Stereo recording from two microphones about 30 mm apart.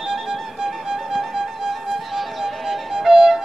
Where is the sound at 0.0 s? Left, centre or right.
Centre.